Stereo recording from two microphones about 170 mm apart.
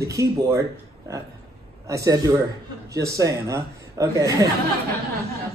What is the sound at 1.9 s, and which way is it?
A man's voice, 20° right (ahead or behind).